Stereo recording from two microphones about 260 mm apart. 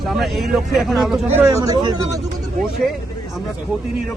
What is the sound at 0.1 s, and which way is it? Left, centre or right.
Speech, centre.